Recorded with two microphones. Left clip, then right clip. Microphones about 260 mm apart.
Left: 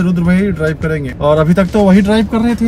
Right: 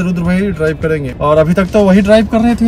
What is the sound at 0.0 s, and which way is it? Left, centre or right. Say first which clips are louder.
Speech: left 1 dB; right.